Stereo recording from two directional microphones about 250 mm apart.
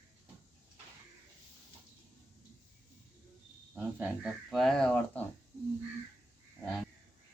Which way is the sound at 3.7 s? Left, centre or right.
Centre.